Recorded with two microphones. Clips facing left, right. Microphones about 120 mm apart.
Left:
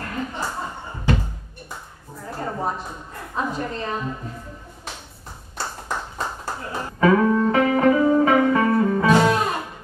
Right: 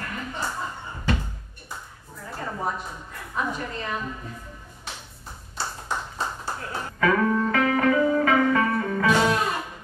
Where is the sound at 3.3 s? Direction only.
35° left (ahead or behind).